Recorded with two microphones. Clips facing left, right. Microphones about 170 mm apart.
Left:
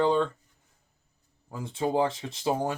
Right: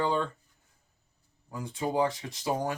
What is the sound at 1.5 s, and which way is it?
Speech, 25° left (ahead or behind).